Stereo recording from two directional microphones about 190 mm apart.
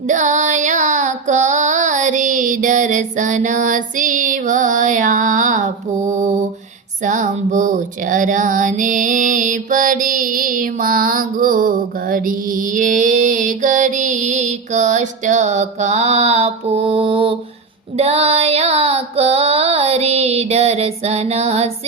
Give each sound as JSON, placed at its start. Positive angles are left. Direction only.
{"t": 0.1, "sound": "child singing", "side_deg": -40}
{"t": 7.0, "sound": "music", "side_deg": -40}
{"t": 17.9, "sound": "child singing", "side_deg": -35}